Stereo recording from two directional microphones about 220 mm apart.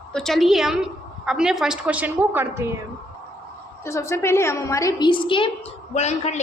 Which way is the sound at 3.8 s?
15° left (ahead or behind).